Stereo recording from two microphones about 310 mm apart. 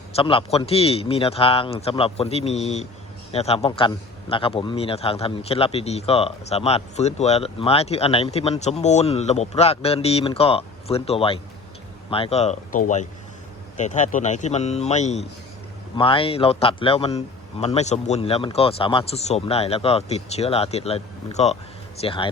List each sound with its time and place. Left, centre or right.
0.1 s a man's voice: centre